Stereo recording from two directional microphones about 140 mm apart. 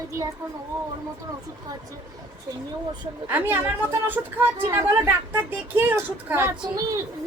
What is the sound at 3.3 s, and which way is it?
Speech, 15° right (ahead or behind).